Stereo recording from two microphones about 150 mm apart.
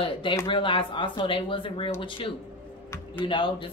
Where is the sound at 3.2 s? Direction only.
35° left (ahead or behind).